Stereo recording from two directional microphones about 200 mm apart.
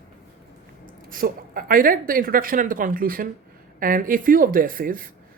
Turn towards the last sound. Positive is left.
turn(degrees=-45)  # may be behind; listen again after turning